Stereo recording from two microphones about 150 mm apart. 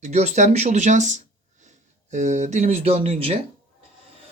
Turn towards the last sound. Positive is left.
turn(degrees=-40)  # may be behind; listen again after turning